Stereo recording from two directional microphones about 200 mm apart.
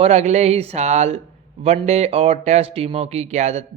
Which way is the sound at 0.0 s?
35° right (ahead or behind).